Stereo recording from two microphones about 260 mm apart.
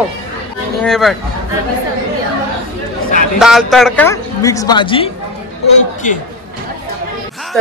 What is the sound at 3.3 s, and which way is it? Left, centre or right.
Speech, centre.